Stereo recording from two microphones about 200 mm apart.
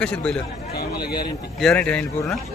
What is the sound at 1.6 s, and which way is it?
Speech, 5° left (ahead or behind).